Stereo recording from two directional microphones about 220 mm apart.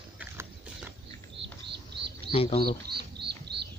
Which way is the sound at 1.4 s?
50° right (ahead or behind).